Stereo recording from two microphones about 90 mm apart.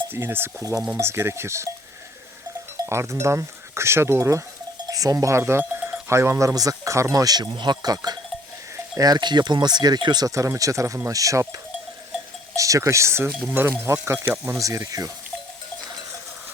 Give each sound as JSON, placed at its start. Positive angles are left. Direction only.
{"t": 0.1, "sound": "stir", "side_deg": -25}
{"t": 0.9, "sound": "speech", "side_deg": -30}
{"t": 2.7, "sound": "speech", "side_deg": -30}
{"t": 7.5, "sound": "speech", "side_deg": -55}
{"t": 12.5, "sound": "speech", "side_deg": -35}